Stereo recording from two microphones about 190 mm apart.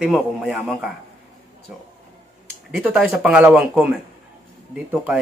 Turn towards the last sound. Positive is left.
turn(degrees=-10)  # may be behind; listen again after turning